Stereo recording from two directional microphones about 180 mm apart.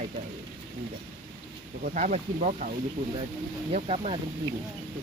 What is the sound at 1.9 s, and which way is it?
Speech, 40° right (ahead or behind).